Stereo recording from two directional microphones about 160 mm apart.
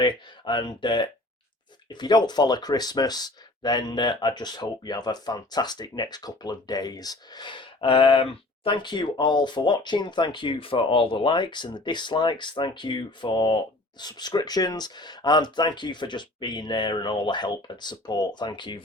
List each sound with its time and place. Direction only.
0.0 s speech: 30° left (ahead or behind)